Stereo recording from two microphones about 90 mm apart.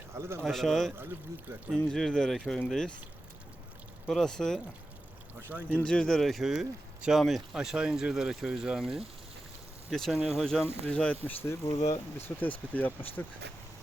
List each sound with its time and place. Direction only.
0.2 s speech: 30° right (ahead or behind)
0.4 s speech: centre (ahead or behind)
4.0 s speech: 5° left (ahead or behind)
5.3 s speech: 20° right (ahead or behind)
5.7 s speech: 10° left (ahead or behind)
10.8 s speech: 10° left (ahead or behind)
11.2 s speech: 25° left (ahead or behind)